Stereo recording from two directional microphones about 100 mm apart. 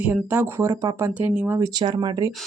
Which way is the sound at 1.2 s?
15° right (ahead or behind).